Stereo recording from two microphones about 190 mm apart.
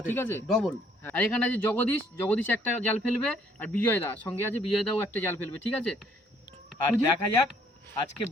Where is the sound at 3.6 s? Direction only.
10° left (ahead or behind).